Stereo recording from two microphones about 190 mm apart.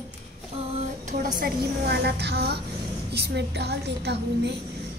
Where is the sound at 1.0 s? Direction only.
45° right (ahead or behind).